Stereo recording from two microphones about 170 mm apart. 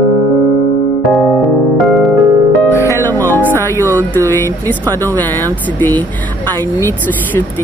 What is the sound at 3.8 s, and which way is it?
Speech, 10° left (ahead or behind).